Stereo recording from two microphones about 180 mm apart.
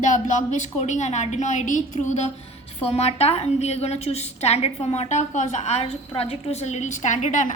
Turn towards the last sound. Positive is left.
turn(degrees=45)  # may be behind; listen again after turning